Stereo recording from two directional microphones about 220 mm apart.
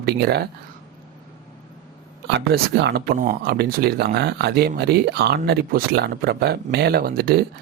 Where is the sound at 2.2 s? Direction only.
50° right (ahead or behind).